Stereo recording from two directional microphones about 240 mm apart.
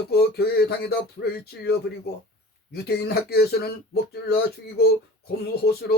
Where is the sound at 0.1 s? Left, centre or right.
Left.